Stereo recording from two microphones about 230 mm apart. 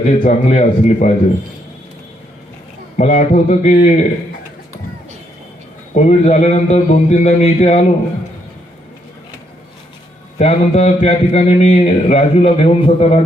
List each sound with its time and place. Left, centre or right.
0.2 s a man's voice: left
3.0 s a man's voice: left
5.9 s a man's voice: left
10.3 s a man's voice: left